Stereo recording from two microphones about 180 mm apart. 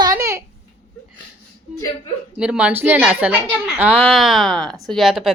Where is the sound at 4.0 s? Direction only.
Centre (ahead or behind).